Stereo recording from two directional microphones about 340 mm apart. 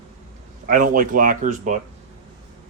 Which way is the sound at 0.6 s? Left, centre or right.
Right.